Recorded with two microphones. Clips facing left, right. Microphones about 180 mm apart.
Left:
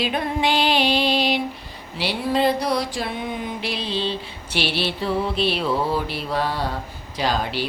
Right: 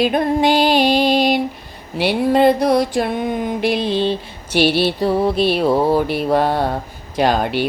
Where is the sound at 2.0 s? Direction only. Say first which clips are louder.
Right 7 dB; 55° right (ahead or behind).